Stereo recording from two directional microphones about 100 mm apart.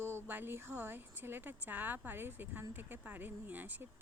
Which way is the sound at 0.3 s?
20° right (ahead or behind).